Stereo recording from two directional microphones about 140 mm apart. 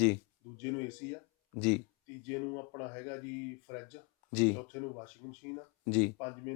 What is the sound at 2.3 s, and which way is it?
Speech, 15° left (ahead or behind).